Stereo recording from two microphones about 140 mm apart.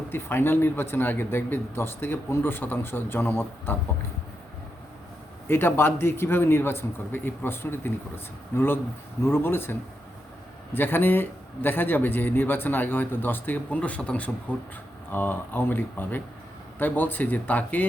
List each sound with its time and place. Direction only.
0.1 s speech: 15° left (ahead or behind)
5.5 s speech: 15° left (ahead or behind)
10.8 s speech: 15° left (ahead or behind)